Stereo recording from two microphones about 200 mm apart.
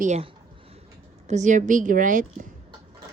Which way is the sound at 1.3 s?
35° right (ahead or behind).